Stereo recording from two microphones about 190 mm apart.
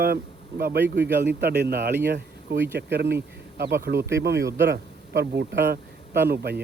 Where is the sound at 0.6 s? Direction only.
60° right (ahead or behind).